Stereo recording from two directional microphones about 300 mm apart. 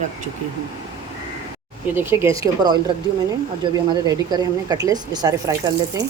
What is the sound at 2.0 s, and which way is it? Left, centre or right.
A woman's voice, centre.